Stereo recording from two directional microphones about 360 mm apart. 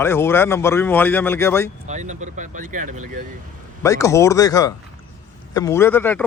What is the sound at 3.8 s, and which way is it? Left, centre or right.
Speech, centre.